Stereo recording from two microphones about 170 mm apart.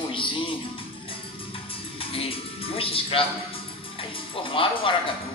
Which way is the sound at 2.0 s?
35° left (ahead or behind).